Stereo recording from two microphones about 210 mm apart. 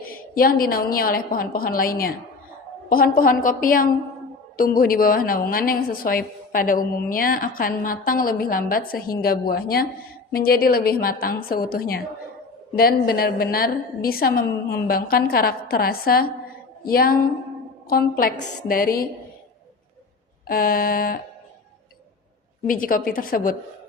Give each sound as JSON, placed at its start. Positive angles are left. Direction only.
{"t": 0.0, "sound": "a woman's voice", "side_deg": 45}
{"t": 20.5, "sound": "a woman's voice", "side_deg": 45}
{"t": 22.6, "sound": "a woman's voice", "side_deg": 40}